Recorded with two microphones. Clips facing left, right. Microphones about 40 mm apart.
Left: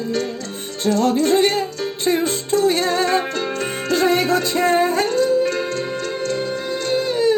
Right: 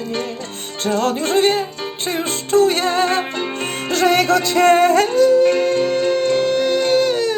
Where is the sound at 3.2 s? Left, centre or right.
Right.